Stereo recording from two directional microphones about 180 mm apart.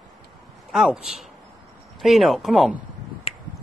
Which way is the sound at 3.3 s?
35° left (ahead or behind).